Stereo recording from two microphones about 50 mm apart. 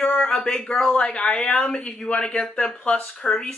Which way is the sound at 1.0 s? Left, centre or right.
Left.